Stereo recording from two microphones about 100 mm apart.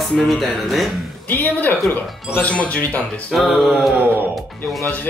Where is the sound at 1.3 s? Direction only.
15° left (ahead or behind).